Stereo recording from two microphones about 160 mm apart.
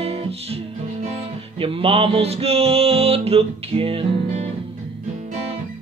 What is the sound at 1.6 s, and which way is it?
Speech, 35° right (ahead or behind).